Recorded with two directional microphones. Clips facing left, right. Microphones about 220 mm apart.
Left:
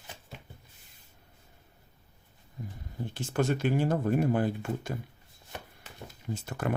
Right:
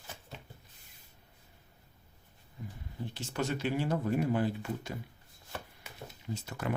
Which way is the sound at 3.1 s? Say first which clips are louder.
Left 6 dB; 50° left (ahead or behind).